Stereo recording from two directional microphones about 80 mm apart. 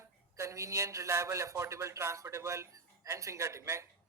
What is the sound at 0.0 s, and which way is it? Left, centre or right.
A man's voice, right.